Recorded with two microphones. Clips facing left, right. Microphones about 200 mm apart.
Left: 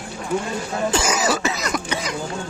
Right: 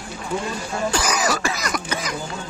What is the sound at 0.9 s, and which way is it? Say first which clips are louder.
Cough: left 2 dB; 25° left (ahead or behind).